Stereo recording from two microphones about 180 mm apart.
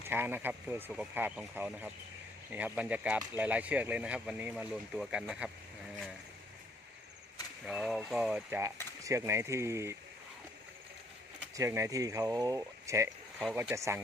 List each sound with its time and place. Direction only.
0.0 s speech: 10° right (ahead or behind)
7.6 s speech: centre (ahead or behind)
11.5 s speech: 15° right (ahead or behind)